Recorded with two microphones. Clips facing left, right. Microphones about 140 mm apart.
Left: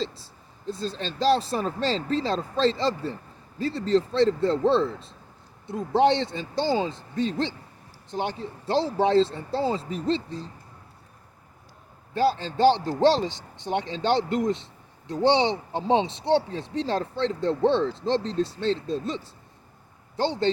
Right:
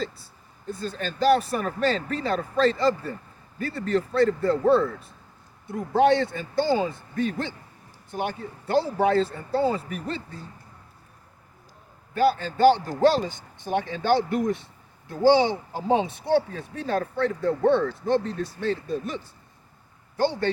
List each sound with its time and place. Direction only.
0.0 s speech: 30° left (ahead or behind)
12.1 s speech: 25° left (ahead or behind)
13.2 s speech: 90° left
13.7 s speech: 25° left (ahead or behind)